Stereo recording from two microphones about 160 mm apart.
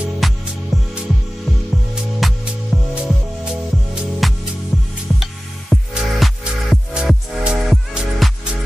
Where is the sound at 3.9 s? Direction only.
Centre (ahead or behind).